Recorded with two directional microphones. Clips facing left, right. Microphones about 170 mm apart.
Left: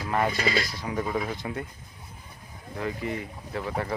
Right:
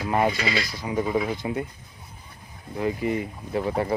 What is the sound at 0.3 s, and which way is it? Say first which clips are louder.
Speech: even; 45° left (ahead or behind).